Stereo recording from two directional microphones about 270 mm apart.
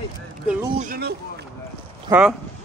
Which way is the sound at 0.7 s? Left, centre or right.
Right.